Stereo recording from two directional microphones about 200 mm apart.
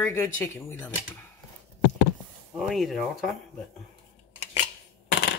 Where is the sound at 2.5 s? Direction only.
Centre (ahead or behind).